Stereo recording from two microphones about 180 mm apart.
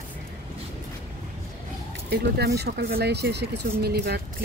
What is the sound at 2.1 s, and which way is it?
Speech, 65° right (ahead or behind).